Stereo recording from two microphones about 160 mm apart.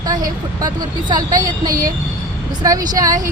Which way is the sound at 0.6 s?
25° right (ahead or behind).